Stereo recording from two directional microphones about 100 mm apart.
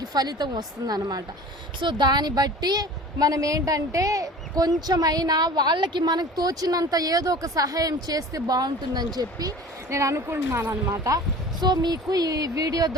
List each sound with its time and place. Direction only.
0.1 s a woman's voice: 45° right (ahead or behind)
9.9 s a woman's voice: 30° right (ahead or behind)